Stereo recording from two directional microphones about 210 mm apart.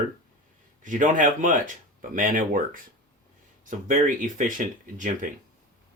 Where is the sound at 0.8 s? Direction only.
40° right (ahead or behind).